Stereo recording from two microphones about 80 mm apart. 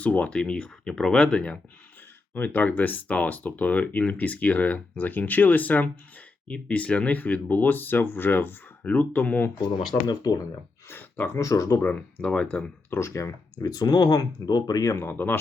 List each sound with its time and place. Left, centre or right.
0.0 s speech: centre
9.9 s speech: left
10.8 s speech: left
11.3 s speech: left
11.8 s speech: centre
12.9 s speech: left
14.8 s speech: left
15.1 s speech: left